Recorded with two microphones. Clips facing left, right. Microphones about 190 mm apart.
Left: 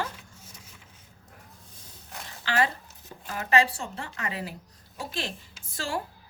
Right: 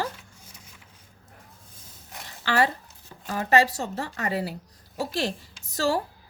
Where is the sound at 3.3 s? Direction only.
35° right (ahead or behind).